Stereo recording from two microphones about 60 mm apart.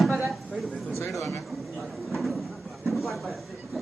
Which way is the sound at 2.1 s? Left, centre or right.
Centre.